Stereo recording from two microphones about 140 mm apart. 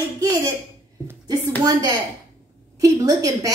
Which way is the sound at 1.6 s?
25° right (ahead or behind).